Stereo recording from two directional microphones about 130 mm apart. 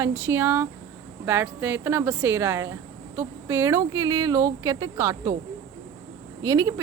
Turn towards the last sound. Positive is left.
turn(degrees=-25)  # may be behind; listen again after turning